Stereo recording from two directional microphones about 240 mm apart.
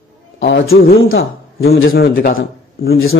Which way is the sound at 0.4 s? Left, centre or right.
Left.